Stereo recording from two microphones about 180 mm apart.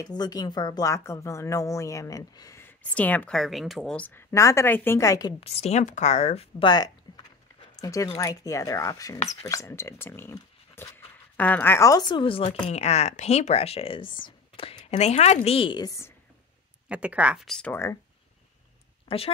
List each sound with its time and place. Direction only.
0.0 s speech: 20° left (ahead or behind)
5.4 s speech: 35° left (ahead or behind)
6.6 s speech: 25° left (ahead or behind)
16.9 s speech: 5° right (ahead or behind); by 17.9 s 10° left (ahead or behind)
19.0 s speech: 30° left (ahead or behind)